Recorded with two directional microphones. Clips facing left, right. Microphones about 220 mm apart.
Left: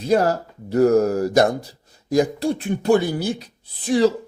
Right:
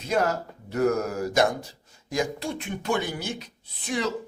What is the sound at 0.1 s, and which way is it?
Speech, 35° left (ahead or behind).